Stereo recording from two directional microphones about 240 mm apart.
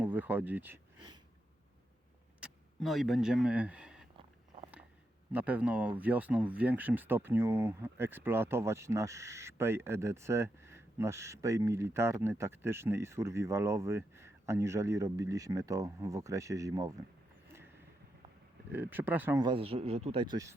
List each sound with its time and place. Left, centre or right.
0.0 s speech: centre
2.4 s speech: centre
5.3 s speech: centre
18.7 s speech: centre